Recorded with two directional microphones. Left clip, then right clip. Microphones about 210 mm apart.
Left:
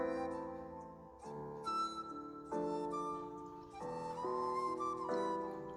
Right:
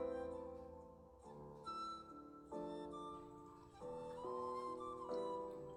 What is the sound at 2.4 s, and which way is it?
Music, 20° left (ahead or behind).